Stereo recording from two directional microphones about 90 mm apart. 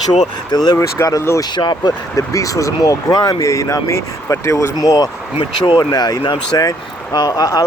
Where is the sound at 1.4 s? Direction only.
55° left (ahead or behind).